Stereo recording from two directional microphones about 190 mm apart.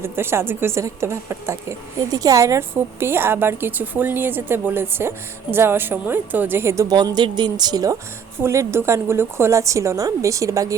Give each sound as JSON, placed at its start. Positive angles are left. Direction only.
{"t": 0.0, "sound": "a woman's voice", "side_deg": -15}